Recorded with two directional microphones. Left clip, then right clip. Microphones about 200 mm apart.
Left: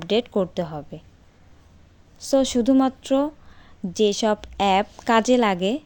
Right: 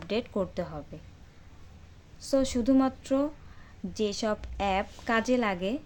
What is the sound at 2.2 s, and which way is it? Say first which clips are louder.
Speech: left 7 dB; 30° left (ahead or behind).